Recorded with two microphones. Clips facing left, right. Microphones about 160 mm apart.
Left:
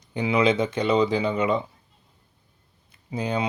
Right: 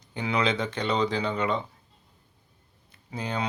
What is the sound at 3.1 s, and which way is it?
Speech, 15° left (ahead or behind).